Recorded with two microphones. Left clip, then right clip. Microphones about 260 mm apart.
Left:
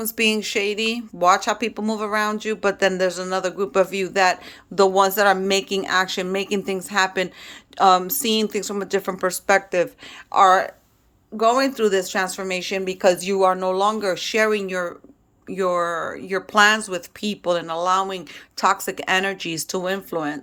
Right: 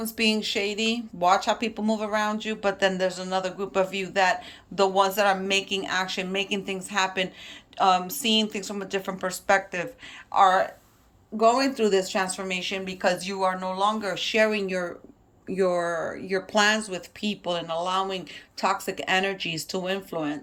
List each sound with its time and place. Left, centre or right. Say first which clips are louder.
0.0 s speech: left 4 dB; centre